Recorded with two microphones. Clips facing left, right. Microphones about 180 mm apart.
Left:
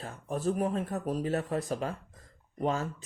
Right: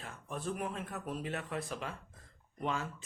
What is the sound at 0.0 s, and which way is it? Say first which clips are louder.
Speech: left 9 dB; 40° left (ahead or behind).